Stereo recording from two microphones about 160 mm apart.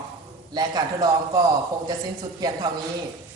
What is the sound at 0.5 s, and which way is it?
Speech, 25° right (ahead or behind).